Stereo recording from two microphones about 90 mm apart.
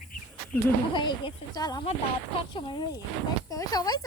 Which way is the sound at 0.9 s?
55° left (ahead or behind).